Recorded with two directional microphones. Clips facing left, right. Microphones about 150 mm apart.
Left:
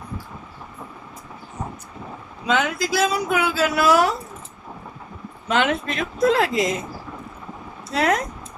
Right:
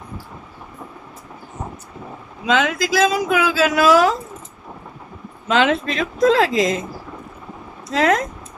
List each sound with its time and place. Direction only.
2.5 s a woman's voice: 90° right
5.5 s a woman's voice: 90° right
7.9 s a woman's voice: 90° right